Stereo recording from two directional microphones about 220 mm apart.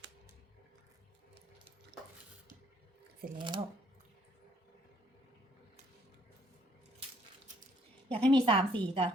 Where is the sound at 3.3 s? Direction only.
20° right (ahead or behind).